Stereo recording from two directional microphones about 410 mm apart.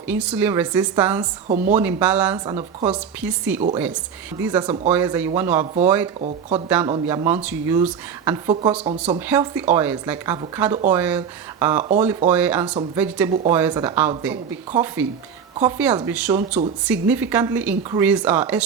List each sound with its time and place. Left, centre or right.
0.1 s speech: centre
1.5 s speech: centre
1.7 s speech: centre
11.8 s speech: centre
12.3 s speech: centre